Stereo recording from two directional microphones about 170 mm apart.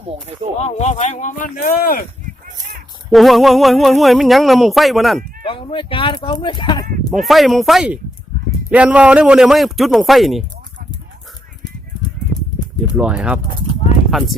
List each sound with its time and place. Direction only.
0.6 s speech: 40° left (ahead or behind); by 2.0 s 55° left (ahead or behind)
3.1 s speech: centre (ahead or behind)
5.5 s speech: 30° left (ahead or behind)
7.1 s speech: centre (ahead or behind)
13.0 s speech: 5° right (ahead or behind)